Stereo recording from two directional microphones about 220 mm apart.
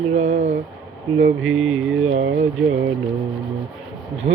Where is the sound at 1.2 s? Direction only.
65° right (ahead or behind).